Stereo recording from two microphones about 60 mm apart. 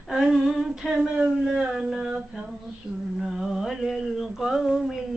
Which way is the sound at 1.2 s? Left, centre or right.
Centre.